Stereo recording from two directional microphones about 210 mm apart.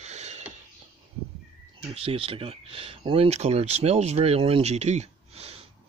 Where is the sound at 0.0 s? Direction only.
35° right (ahead or behind).